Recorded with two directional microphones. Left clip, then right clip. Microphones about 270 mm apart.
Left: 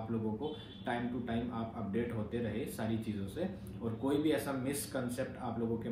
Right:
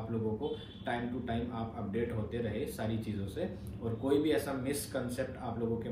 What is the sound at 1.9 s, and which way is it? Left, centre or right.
Speech, centre.